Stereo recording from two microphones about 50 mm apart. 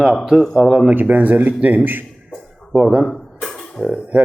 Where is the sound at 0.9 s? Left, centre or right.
Right.